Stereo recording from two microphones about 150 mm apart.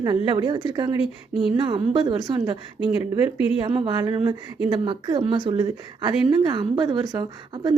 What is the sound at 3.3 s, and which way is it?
Speech, 35° left (ahead or behind).